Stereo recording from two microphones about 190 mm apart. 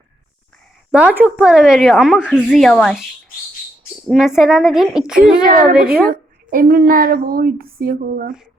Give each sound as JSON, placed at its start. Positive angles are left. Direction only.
{"t": 0.9, "sound": "a woman's voice", "side_deg": -10}
{"t": 4.0, "sound": "a woman's voice", "side_deg": 0}
{"t": 6.1, "sound": "a woman's voice", "side_deg": -50}